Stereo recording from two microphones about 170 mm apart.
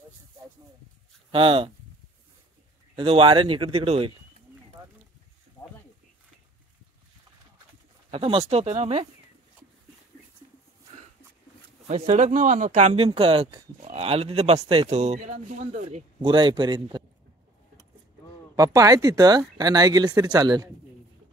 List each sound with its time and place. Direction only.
1.3 s speech: 30° right (ahead or behind)
3.0 s speech: 30° right (ahead or behind)
8.1 s speech: 35° right (ahead or behind)
11.9 s speech: 45° right (ahead or behind)
16.2 s speech: 30° right (ahead or behind)
18.6 s speech: 20° right (ahead or behind)